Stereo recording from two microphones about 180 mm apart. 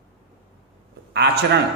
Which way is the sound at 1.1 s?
70° right (ahead or behind).